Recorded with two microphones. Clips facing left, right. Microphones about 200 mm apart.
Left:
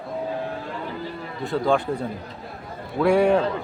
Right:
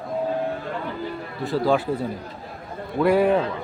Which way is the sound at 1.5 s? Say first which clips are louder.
Right 1 dB; 5° right (ahead or behind).